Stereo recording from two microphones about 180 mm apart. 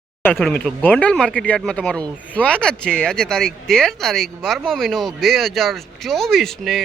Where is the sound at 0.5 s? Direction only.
10° left (ahead or behind).